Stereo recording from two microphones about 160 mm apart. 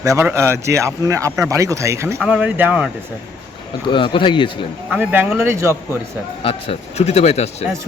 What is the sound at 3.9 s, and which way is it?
Speech, 30° left (ahead or behind).